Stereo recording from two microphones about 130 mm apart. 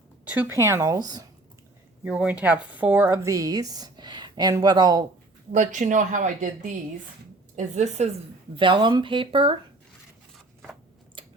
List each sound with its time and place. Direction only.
0.3 s a woman's voice: 10° right (ahead or behind); by 1.3 s 30° right (ahead or behind)
2.0 s a woman's voice: 10° right (ahead or behind); by 5.0 s 30° right (ahead or behind)
5.5 s speech: 70° right (ahead or behind)
7.5 s a woman's voice: 65° right (ahead or behind)
8.5 s speech: 40° right (ahead or behind)
10.3 s scissors: centre (ahead or behind)
11.2 s chewing: 40° right (ahead or behind)